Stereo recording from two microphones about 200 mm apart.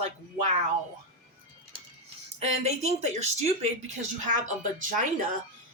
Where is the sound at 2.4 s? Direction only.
35° right (ahead or behind).